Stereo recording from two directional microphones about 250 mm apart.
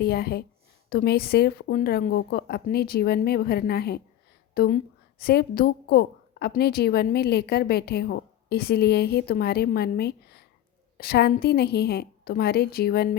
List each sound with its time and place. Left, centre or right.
0.0 s a woman's voice: left